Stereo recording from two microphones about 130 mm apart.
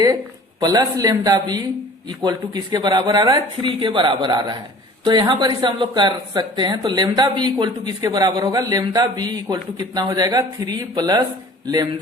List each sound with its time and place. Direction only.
0.6 s speech: 30° right (ahead or behind)
3.6 s speech: 40° right (ahead or behind)